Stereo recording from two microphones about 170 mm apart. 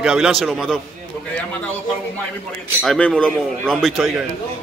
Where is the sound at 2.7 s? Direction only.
5° left (ahead or behind).